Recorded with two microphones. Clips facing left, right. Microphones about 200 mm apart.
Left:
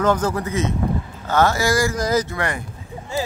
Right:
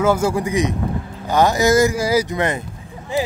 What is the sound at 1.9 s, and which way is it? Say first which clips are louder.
Speech: right 2 dB; 10° right (ahead or behind).